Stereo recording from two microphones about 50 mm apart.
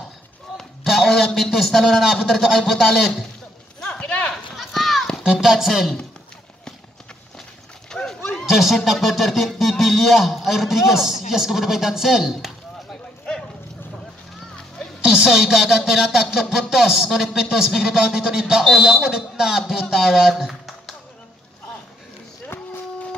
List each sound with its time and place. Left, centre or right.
0.8 s speech: centre
3.8 s clip-clop: centre
4.6 s clip-clop: centre
5.2 s speech: centre
7.9 s livestock: centre
8.5 s speech: centre
15.0 s speech: centre